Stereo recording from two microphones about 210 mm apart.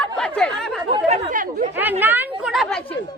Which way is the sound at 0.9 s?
35° right (ahead or behind).